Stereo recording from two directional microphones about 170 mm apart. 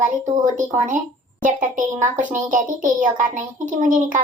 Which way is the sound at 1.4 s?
50° right (ahead or behind).